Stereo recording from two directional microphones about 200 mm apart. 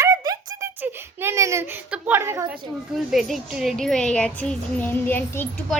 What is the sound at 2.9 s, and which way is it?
Speech, centre (ahead or behind).